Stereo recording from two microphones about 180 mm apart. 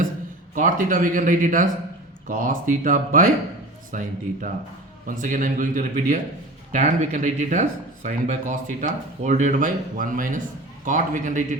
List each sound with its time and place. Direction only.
0.5 s speech: 45° right (ahead or behind)